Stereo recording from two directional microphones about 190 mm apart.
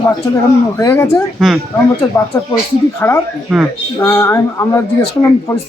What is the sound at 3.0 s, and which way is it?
Speech, 15° left (ahead or behind).